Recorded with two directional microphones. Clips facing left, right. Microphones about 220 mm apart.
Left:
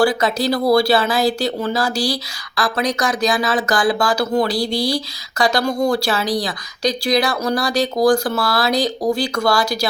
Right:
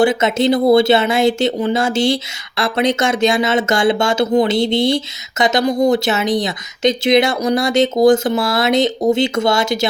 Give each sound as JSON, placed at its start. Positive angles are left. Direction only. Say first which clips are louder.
{"t": 0.0, "sound": "speech", "louder": "right 3 dB", "side_deg": -20}